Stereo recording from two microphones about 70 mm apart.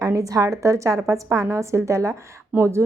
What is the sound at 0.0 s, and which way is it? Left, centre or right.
A woman's voice, right.